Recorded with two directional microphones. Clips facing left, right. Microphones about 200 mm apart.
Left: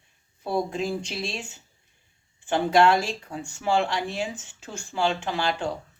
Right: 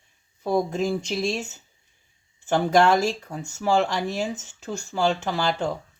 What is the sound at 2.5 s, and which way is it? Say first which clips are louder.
Speech: right 1 dB; 40° right (ahead or behind).